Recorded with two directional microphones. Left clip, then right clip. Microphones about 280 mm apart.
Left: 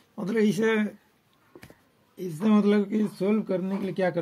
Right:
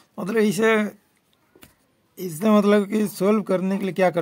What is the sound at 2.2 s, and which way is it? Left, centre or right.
Speech, centre.